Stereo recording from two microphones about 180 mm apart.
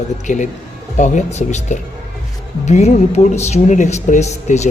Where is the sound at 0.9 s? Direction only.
40° left (ahead or behind).